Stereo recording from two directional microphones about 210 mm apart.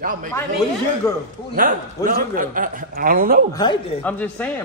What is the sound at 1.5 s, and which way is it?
A man's voice, 40° right (ahead or behind).